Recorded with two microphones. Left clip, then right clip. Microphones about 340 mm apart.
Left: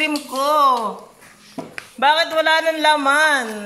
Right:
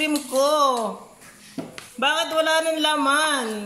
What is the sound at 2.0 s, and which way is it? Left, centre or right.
A man's voice, centre.